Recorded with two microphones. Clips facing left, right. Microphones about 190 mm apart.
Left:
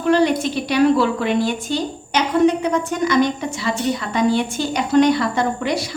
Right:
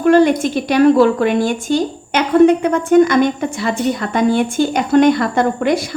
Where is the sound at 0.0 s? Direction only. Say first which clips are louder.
Right 5 dB; 50° right (ahead or behind).